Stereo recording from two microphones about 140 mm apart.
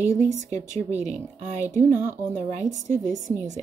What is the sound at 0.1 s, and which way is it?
Speech, 20° left (ahead or behind).